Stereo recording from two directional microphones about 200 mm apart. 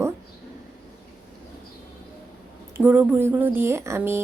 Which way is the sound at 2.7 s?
10° right (ahead or behind).